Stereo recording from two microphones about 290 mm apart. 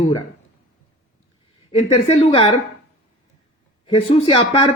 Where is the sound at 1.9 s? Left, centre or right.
Centre.